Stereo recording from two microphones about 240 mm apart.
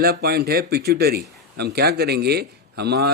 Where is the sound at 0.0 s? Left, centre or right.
Right.